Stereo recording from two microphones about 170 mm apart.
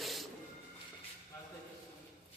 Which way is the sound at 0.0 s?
Centre (ahead or behind).